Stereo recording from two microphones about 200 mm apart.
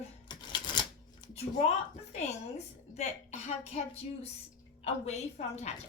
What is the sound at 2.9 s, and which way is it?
Speech, 35° left (ahead or behind).